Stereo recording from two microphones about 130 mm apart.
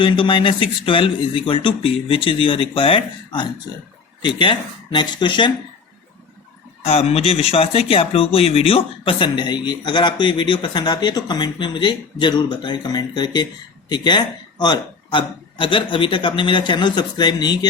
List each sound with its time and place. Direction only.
0.0 s speech: 40° left (ahead or behind)
6.8 s speech: 50° left (ahead or behind); by 17.7 s 35° left (ahead or behind)